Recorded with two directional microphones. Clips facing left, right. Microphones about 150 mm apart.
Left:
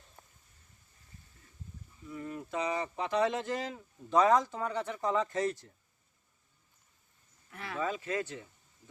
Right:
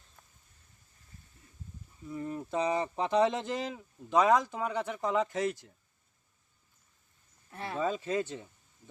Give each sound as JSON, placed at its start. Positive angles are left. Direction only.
{"t": 2.0, "sound": "speech", "side_deg": -30}
{"t": 7.5, "sound": "speech", "side_deg": -30}